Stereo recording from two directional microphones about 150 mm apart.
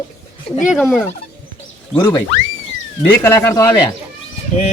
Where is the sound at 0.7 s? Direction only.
Centre (ahead or behind).